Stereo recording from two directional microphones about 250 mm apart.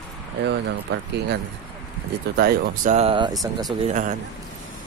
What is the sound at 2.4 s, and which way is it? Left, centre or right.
Speech, right.